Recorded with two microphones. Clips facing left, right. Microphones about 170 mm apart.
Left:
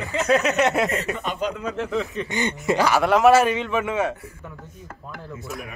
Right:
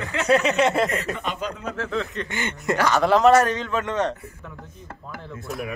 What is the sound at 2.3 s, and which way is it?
Speech, 20° left (ahead or behind).